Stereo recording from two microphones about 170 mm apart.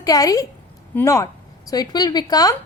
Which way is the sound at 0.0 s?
20° left (ahead or behind).